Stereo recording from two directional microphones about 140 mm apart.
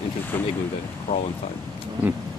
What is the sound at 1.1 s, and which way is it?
Speech, 90° left.